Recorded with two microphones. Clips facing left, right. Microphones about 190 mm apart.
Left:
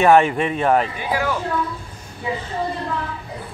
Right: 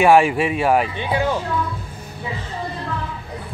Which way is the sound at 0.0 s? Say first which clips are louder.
Even; 10° right (ahead or behind).